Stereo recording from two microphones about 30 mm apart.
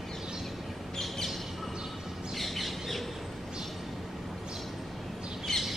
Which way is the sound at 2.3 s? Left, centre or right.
Centre.